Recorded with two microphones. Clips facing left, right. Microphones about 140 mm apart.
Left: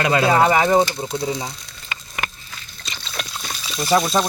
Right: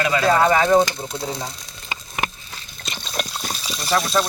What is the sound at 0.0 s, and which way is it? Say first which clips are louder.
Pigeon: left 2 dB; 40° left (ahead or behind).